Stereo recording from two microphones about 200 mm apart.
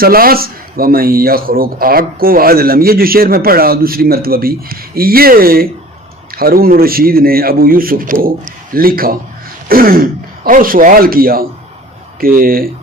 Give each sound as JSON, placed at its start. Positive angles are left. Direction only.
{"t": 0.0, "sound": "speech", "side_deg": -45}